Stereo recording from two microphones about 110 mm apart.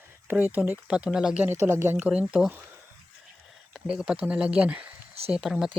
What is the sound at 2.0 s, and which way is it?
Speech, 10° right (ahead or behind).